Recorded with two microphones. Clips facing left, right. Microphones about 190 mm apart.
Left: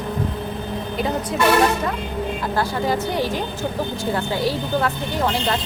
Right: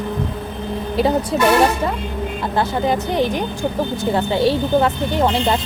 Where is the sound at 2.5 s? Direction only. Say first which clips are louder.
Right 4 dB; 20° right (ahead or behind).